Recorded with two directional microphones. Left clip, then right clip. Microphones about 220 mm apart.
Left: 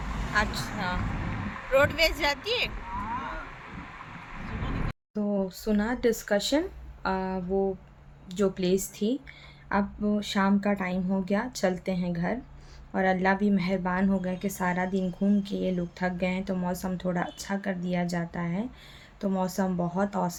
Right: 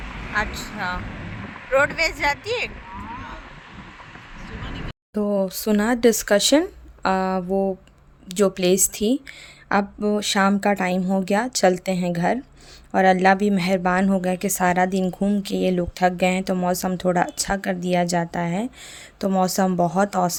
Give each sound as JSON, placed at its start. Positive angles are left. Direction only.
{"t": 0.3, "sound": "a woman's voice", "side_deg": -5}
{"t": 5.1, "sound": "a woman's voice", "side_deg": -50}